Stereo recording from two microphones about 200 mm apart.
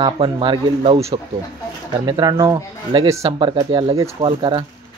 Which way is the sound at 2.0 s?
20° right (ahead or behind).